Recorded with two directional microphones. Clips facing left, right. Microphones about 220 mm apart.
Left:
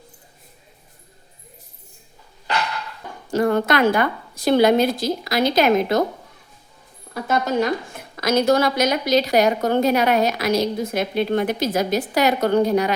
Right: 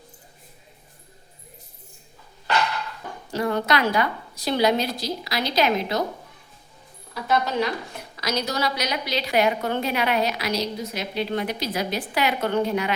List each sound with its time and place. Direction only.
3.3 s a woman's voice: 50° left (ahead or behind)
7.1 s a woman's voice: 50° left (ahead or behind)